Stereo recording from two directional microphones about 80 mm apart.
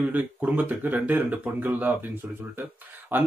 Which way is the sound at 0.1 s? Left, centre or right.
Right.